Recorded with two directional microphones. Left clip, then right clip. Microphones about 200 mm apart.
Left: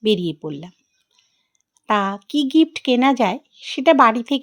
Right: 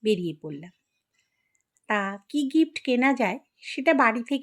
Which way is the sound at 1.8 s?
30° left (ahead or behind).